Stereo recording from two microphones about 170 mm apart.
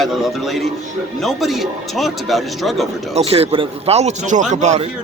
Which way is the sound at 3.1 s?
35° right (ahead or behind).